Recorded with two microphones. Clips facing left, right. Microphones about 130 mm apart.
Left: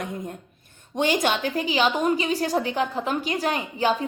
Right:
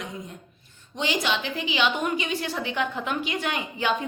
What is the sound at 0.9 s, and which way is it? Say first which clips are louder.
A woman's voice: left 4 dB; 50° left (ahead or behind).